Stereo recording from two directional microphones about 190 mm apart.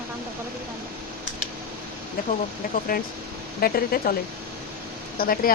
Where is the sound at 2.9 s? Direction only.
50° left (ahead or behind).